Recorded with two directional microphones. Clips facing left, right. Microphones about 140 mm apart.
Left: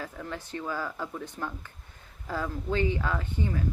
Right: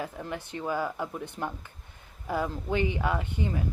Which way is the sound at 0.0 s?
15° right (ahead or behind).